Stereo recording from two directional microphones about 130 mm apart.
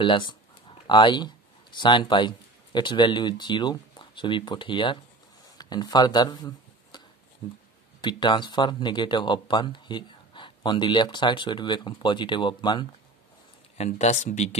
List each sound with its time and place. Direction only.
0.0 s speech: 40° left (ahead or behind)
13.7 s speech: 60° left (ahead or behind)